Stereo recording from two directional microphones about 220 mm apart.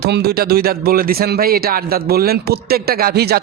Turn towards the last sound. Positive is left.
turn(degrees=-45)  # may be behind; listen again after turning